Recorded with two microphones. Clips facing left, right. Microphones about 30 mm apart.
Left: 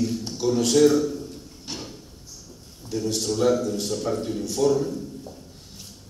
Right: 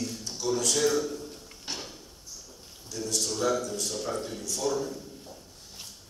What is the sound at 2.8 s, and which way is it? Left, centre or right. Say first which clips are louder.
Speech: left 6 dB; left.